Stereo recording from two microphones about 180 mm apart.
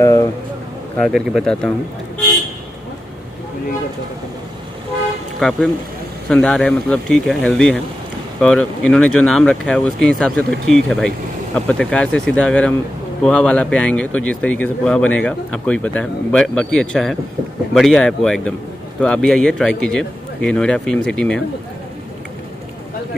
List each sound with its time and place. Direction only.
0.0 s a sound: 15° left (ahead or behind)
0.9 s speech: centre (ahead or behind)
5.4 s speech: centre (ahead or behind)